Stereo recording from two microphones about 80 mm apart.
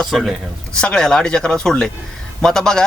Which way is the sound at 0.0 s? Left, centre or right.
Centre.